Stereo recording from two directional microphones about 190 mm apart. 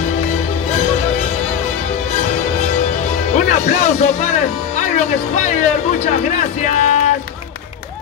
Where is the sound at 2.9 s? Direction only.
40° left (ahead or behind).